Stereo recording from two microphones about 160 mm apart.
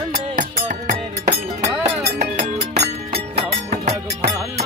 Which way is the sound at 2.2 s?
45° right (ahead or behind).